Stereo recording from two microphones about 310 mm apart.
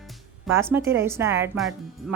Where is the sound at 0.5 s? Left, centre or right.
Centre.